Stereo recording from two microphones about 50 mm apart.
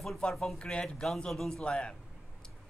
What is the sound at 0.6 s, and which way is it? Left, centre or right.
Speech, centre.